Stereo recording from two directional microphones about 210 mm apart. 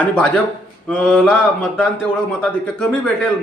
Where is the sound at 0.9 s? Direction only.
5° left (ahead or behind).